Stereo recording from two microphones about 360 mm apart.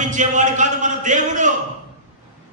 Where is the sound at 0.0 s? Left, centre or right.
Right.